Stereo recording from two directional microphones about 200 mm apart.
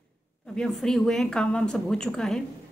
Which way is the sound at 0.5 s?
5° left (ahead or behind).